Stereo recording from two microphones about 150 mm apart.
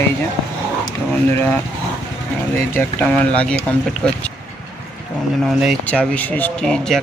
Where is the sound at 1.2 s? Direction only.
15° left (ahead or behind).